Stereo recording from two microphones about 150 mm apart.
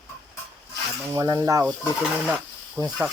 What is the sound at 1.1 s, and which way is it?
Speech, 25° right (ahead or behind).